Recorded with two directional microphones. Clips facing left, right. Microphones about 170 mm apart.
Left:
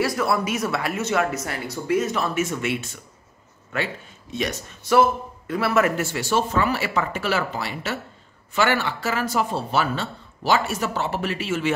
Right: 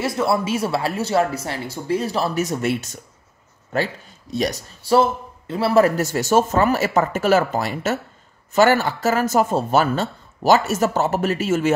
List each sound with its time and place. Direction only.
0.0 s speech: 25° right (ahead or behind); by 11.7 s 45° right (ahead or behind)